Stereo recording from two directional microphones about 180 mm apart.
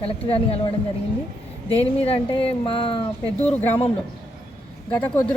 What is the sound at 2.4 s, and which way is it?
Speech, 30° left (ahead or behind).